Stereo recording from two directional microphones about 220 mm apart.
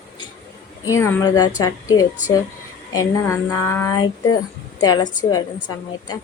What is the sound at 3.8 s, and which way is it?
A woman's voice, 15° left (ahead or behind).